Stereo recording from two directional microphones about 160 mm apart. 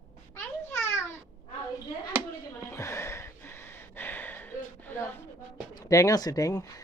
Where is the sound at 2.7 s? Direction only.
20° left (ahead or behind).